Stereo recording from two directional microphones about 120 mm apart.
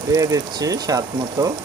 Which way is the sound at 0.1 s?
30° right (ahead or behind).